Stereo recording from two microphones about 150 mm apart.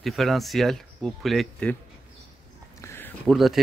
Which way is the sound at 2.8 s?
15° left (ahead or behind).